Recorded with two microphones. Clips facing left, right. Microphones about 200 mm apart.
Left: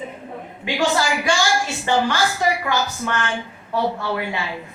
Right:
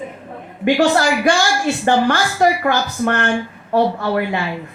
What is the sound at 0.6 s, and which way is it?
A woman's voice, 55° right (ahead or behind).